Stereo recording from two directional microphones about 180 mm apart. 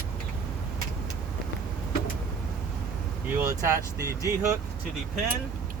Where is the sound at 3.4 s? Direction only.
15° right (ahead or behind).